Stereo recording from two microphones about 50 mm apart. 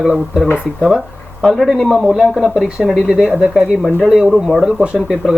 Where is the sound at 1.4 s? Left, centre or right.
Centre.